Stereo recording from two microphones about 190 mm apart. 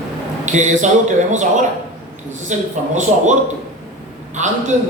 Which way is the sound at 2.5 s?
40° right (ahead or behind).